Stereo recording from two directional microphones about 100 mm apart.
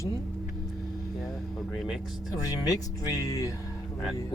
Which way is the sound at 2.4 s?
35° left (ahead or behind).